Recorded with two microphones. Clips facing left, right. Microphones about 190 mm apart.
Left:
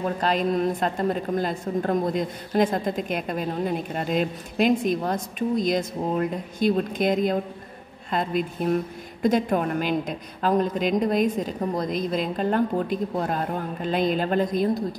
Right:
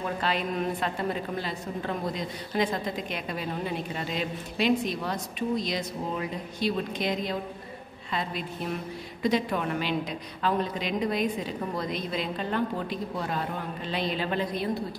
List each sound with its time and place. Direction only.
0.2 s a woman's voice: 40° left (ahead or behind)